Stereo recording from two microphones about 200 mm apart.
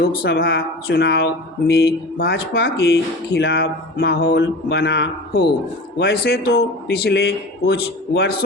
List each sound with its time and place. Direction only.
0.0 s speech: 50° left (ahead or behind)